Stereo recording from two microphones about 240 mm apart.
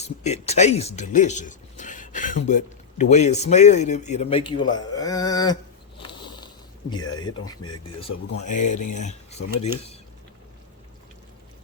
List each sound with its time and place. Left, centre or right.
0.0 s speech: left
6.0 s a sound: centre
6.9 s speech: centre